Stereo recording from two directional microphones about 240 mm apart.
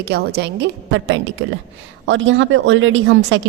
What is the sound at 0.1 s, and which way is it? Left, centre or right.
A woman's voice, right.